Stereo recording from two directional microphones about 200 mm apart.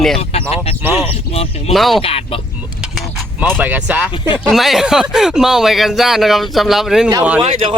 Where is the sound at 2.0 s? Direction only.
30° left (ahead or behind).